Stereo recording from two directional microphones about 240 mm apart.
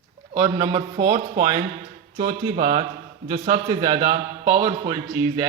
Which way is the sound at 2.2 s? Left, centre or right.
Right.